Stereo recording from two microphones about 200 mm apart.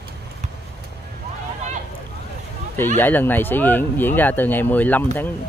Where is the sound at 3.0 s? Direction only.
10° left (ahead or behind).